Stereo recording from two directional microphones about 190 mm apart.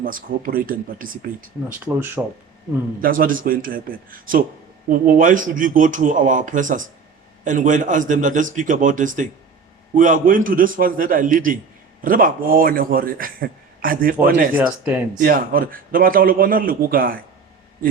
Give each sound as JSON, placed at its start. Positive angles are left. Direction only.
{"t": 0.0, "sound": "a man's voice", "side_deg": -45}
{"t": 1.8, "sound": "speech", "side_deg": -10}
{"t": 3.0, "sound": "a man's voice", "side_deg": -50}
{"t": 14.5, "sound": "speech", "side_deg": -10}
{"t": 15.2, "sound": "a man's voice", "side_deg": -50}